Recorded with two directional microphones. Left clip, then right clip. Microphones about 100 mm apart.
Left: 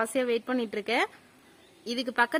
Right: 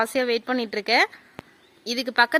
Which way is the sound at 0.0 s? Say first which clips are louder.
Right 5 dB; 20° right (ahead or behind).